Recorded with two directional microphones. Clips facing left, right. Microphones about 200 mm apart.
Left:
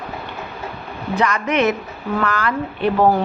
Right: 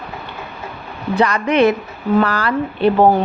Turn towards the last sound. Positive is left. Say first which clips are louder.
# right 4 dB
turn(degrees=-35)  # may be behind; listen again after turning